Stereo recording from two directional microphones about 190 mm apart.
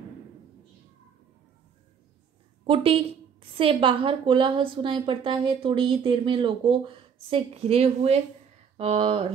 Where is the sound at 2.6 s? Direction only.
30° right (ahead or behind).